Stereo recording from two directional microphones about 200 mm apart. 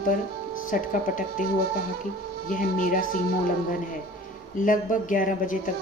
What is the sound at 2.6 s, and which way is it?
Speech, 40° left (ahead or behind).